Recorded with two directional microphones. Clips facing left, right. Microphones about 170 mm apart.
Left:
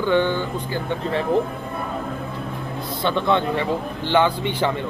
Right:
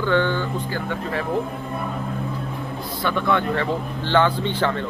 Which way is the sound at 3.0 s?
25° left (ahead or behind).